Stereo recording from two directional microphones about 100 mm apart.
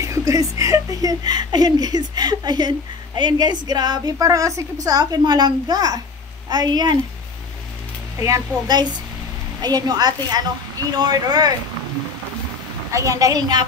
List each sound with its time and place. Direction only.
0.0 s a woman's voice: 30° right (ahead or behind)
9.6 s a woman's voice: 45° right (ahead or behind)
12.9 s a woman's voice: 35° right (ahead or behind)